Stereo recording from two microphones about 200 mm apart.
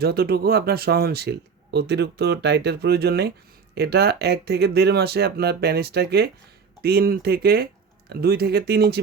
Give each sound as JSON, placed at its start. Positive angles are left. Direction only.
{"t": 0.0, "sound": "speech", "side_deg": -50}